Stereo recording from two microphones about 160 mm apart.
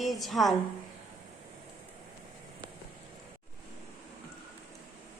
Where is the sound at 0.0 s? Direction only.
Centre (ahead or behind).